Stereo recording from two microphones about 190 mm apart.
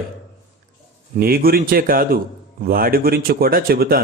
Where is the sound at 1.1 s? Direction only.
50° right (ahead or behind).